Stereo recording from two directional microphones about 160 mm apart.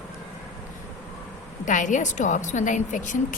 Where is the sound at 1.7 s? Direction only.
50° left (ahead or behind).